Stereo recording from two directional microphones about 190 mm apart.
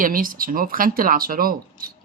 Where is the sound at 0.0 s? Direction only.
45° right (ahead or behind).